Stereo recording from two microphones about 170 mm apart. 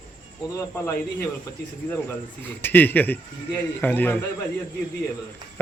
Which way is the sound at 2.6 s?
10° left (ahead or behind).